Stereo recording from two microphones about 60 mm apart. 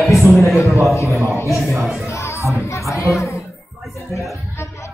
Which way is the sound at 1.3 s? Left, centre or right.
Left.